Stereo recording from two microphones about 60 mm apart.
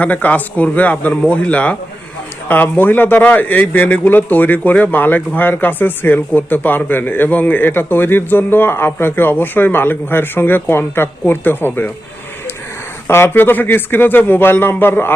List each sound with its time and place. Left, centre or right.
0.0 s a man's voice: left
13.1 s a man's voice: left